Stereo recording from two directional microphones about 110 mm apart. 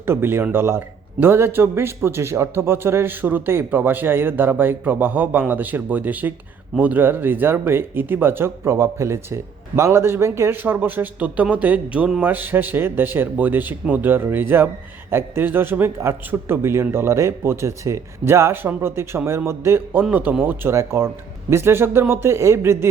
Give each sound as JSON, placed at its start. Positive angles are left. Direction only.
{"t": 0.0, "sound": "a man's voice", "side_deg": -20}